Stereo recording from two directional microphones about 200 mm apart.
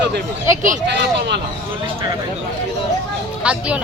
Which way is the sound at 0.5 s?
40° right (ahead or behind).